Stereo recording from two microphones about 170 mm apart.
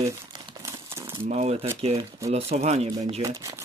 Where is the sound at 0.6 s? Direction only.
15° right (ahead or behind).